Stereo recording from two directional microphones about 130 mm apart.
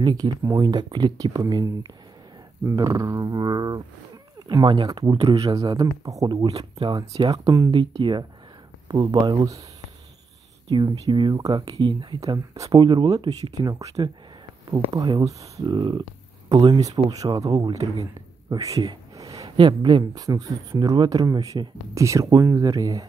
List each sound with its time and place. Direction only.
0.0 s speech: 30° right (ahead or behind)
7.2 s speech: 30° right (ahead or behind)
10.7 s speech: 35° right (ahead or behind)
12.2 s a man's voice: 25° right (ahead or behind)